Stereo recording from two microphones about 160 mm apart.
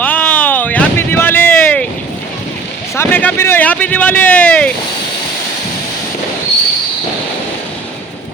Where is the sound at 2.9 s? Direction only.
15° left (ahead or behind).